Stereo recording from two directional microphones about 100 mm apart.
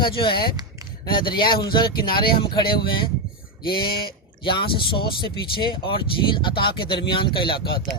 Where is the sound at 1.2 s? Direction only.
50° left (ahead or behind).